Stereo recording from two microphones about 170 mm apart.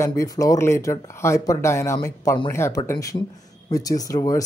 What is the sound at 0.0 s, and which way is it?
Speech, 20° left (ahead or behind).